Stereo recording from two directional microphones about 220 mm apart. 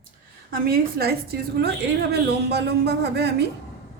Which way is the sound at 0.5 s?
40° right (ahead or behind).